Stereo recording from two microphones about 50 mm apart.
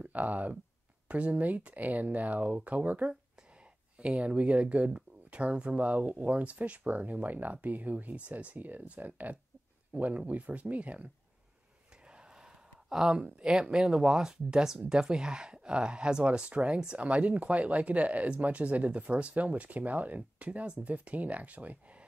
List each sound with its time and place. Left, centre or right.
0.0 s speech: right
12.1 s gasp: centre
12.9 s speech: centre; by 22.0 s right